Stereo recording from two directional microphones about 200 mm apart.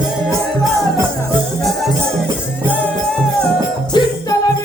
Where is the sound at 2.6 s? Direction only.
5° left (ahead or behind).